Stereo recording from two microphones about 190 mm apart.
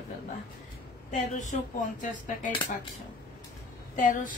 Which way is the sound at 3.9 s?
45° left (ahead or behind).